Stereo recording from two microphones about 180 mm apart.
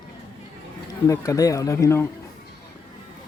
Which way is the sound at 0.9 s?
20° left (ahead or behind).